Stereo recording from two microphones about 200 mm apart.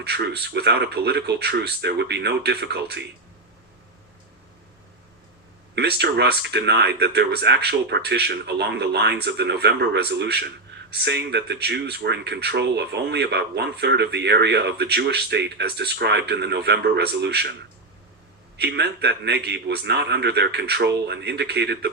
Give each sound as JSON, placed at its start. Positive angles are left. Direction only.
{"t": 0.0, "sound": "speech", "side_deg": -55}
{"t": 5.7, "sound": "speech", "side_deg": -55}
{"t": 18.5, "sound": "speech", "side_deg": -55}